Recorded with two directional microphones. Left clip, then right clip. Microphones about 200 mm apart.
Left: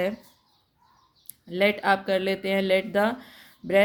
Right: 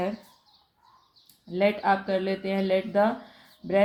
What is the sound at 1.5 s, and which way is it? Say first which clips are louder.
Speech: left 1 dB; 40° left (ahead or behind).